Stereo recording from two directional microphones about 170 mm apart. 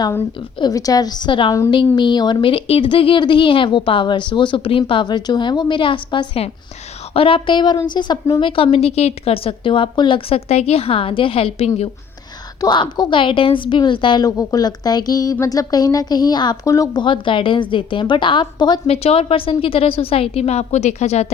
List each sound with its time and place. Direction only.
0.6 s a woman's voice: 20° left (ahead or behind); by 11.9 s 35° left (ahead or behind)
12.5 s a woman's voice: 25° left (ahead or behind)